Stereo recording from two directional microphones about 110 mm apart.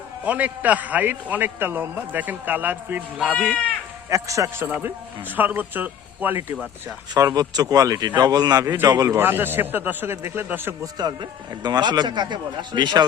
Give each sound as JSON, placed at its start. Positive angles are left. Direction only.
{"t": 0.3, "sound": "a man's voice", "side_deg": -15}
{"t": 4.1, "sound": "a man's voice", "side_deg": -30}
{"t": 7.1, "sound": "a man's voice", "side_deg": -35}
{"t": 8.6, "sound": "a man's voice", "side_deg": -20}
{"t": 8.9, "sound": "a man's voice", "side_deg": -35}
{"t": 9.1, "sound": "a man's voice", "side_deg": -20}
{"t": 10.9, "sound": "a man's voice", "side_deg": -40}